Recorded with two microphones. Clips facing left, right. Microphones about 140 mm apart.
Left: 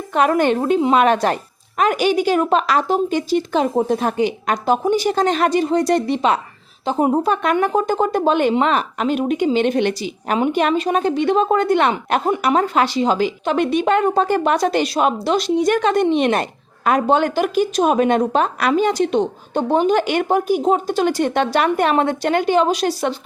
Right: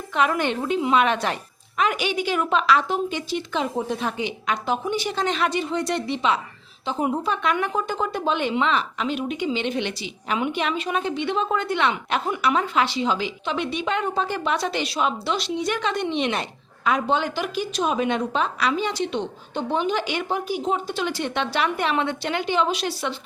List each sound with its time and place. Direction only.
0.1 s speech: 45° left (ahead or behind)